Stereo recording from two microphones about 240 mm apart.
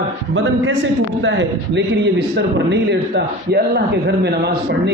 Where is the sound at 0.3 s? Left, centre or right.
Right.